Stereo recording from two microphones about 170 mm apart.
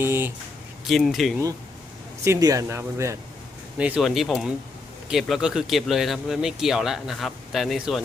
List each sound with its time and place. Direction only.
0.0 s speech: 15° right (ahead or behind)
0.9 s speech: centre (ahead or behind)
2.2 s speech: 20° right (ahead or behind)
3.8 s speech: 5° right (ahead or behind)